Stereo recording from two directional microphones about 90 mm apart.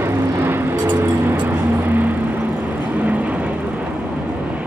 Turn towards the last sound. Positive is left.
turn(degrees=-15)  # may be behind; listen again after turning